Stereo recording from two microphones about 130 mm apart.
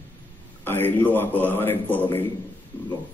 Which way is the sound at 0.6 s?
15° left (ahead or behind).